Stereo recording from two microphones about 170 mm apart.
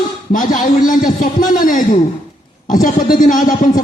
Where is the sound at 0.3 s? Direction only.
55° left (ahead or behind).